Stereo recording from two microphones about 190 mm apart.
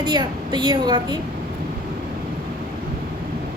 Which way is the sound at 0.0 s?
25° right (ahead or behind).